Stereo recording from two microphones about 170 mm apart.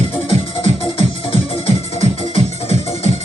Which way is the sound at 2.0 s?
45° right (ahead or behind).